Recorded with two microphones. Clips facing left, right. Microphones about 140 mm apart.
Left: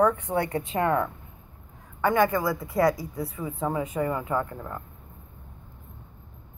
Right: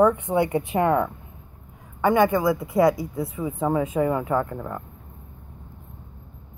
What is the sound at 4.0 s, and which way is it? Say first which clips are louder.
Speech: right 5 dB; 10° right (ahead or behind).